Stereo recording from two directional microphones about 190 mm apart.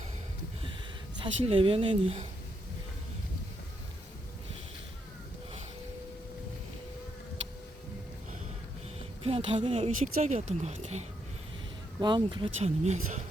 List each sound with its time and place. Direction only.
1.2 s speech: 30° right (ahead or behind)
9.2 s speech: 30° right (ahead or behind)
11.9 s speech: 25° right (ahead or behind)
12.5 s speech: 35° right (ahead or behind)